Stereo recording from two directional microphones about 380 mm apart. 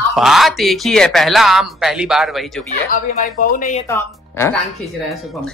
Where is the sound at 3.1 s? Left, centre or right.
Centre.